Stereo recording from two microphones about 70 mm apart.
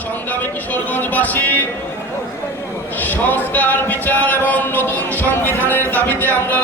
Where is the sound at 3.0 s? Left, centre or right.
Left.